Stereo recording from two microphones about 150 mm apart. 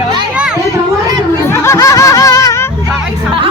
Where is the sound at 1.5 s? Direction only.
20° left (ahead or behind).